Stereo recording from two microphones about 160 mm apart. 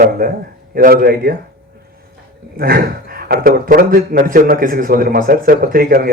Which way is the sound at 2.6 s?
65° right (ahead or behind).